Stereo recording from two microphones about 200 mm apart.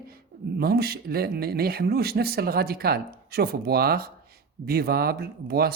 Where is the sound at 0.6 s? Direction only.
50° right (ahead or behind).